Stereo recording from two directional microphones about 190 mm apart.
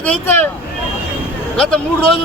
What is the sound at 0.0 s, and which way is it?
Speech, 10° left (ahead or behind).